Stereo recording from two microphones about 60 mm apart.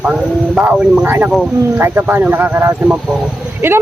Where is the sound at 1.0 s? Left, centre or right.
Right.